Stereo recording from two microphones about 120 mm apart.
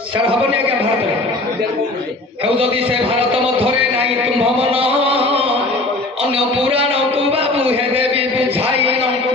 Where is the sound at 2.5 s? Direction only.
50° right (ahead or behind).